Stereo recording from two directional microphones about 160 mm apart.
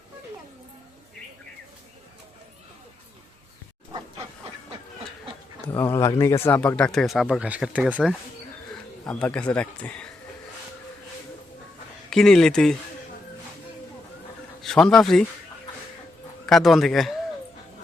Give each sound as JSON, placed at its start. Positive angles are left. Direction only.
{"t": 5.6, "sound": "speech", "side_deg": 15}
{"t": 9.0, "sound": "speech", "side_deg": 5}
{"t": 12.1, "sound": "speech", "side_deg": 5}
{"t": 14.6, "sound": "speech", "side_deg": 5}
{"t": 16.5, "sound": "speech", "side_deg": 0}